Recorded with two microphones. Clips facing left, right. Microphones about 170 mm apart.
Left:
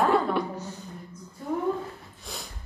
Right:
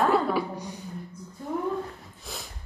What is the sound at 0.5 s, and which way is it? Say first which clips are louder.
Speech: even; 15° right (ahead or behind).